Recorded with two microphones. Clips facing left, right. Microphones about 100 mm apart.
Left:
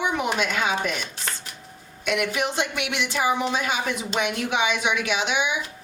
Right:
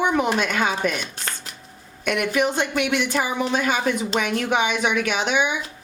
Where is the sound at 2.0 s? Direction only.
45° right (ahead or behind).